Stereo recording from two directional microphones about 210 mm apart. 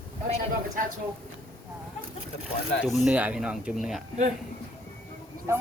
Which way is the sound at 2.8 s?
5° right (ahead or behind).